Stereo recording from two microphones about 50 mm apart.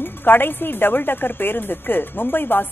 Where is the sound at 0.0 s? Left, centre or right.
Left.